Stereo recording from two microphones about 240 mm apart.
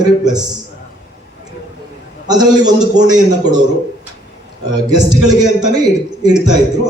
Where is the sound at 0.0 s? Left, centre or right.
Centre.